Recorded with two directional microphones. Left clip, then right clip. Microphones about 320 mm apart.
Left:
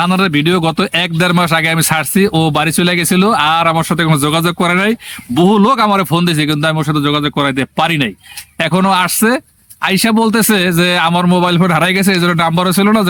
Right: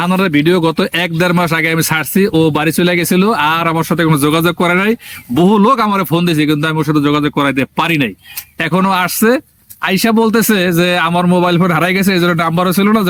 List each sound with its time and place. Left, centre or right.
0.0 s speech: centre